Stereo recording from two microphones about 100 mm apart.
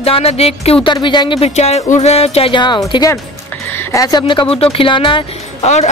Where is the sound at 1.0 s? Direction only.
50° left (ahead or behind).